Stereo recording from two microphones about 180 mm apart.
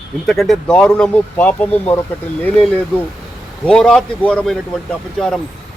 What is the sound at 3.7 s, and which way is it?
Speech, 5° left (ahead or behind).